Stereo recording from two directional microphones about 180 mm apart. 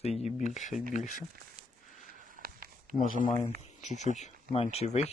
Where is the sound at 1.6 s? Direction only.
35° right (ahead or behind).